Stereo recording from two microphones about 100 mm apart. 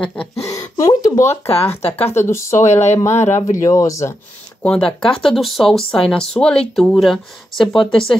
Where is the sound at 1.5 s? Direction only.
80° left.